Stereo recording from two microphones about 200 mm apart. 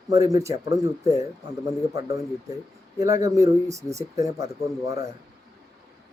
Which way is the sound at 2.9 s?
15° right (ahead or behind).